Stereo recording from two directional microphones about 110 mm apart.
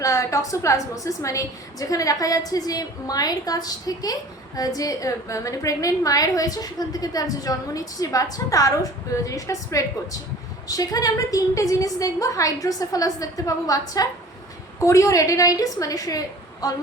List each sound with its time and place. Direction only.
0.0 s a woman's voice: 30° left (ahead or behind)